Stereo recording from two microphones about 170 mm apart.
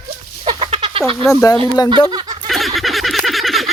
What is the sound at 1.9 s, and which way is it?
Speech, 25° right (ahead or behind).